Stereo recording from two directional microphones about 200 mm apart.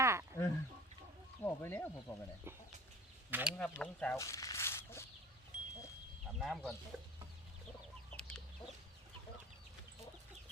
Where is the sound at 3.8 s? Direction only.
5° left (ahead or behind).